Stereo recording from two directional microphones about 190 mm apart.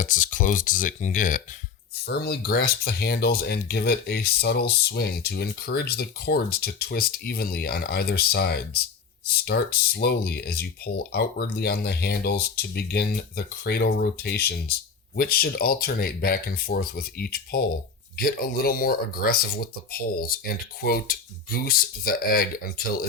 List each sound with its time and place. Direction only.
0.0 s speech: 45° left (ahead or behind)
2.0 s speech: 55° left (ahead or behind)